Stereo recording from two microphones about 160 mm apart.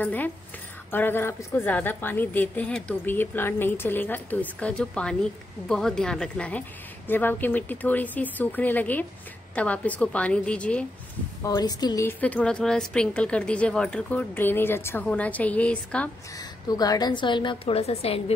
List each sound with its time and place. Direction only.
0.0 s a woman's voice: 10° left (ahead or behind)
11.4 s a woman's voice: 25° left (ahead or behind)
12.1 s a woman's voice: 10° left (ahead or behind)
16.3 s a woman's voice: 25° left (ahead or behind); by 18.2 s 40° left (ahead or behind)